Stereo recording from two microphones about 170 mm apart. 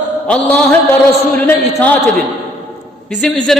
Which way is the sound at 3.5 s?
Centre (ahead or behind).